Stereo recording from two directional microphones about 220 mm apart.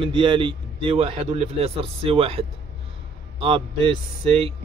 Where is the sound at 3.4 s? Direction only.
25° right (ahead or behind).